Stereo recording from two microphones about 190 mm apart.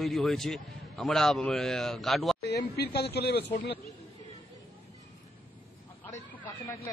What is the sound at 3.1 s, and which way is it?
Speech, 60° left (ahead or behind).